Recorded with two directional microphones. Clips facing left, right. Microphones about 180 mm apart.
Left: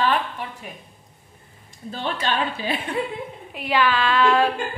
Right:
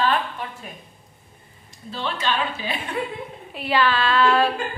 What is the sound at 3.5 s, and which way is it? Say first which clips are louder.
Speech: even; 15° left (ahead or behind).